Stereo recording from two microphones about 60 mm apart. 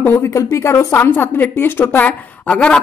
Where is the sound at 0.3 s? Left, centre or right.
Left.